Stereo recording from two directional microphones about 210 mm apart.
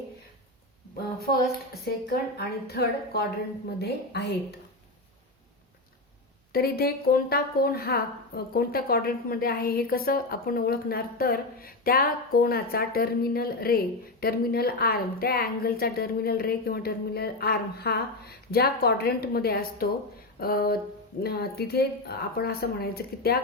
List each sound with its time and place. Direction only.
1.8 s a woman's voice: 50° left (ahead or behind)
6.5 s a woman's voice: 45° left (ahead or behind)